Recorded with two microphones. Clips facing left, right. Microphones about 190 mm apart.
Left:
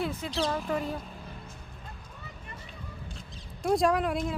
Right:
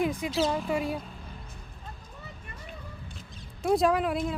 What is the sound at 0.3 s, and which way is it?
Speech, 5° right (ahead or behind).